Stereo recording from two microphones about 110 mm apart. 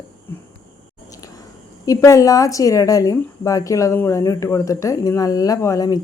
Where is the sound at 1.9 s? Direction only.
30° left (ahead or behind).